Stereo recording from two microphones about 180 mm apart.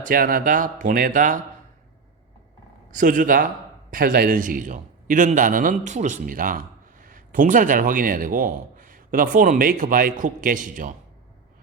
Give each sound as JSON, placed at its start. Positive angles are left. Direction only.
{"t": 0.0, "sound": "a man's voice", "side_deg": -55}
{"t": 2.9, "sound": "a man's voice", "side_deg": -50}